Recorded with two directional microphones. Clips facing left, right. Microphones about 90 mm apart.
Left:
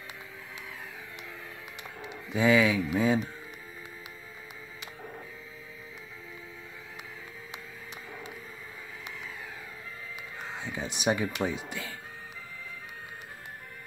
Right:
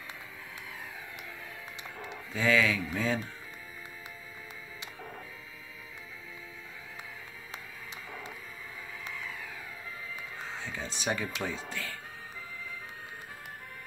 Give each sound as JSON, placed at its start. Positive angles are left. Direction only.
{"t": 1.8, "sound": "speech", "side_deg": 15}
{"t": 10.4, "sound": "music", "side_deg": 15}